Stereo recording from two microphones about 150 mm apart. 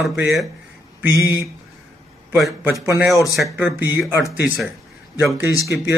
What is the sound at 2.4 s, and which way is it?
A man's voice, 15° right (ahead or behind).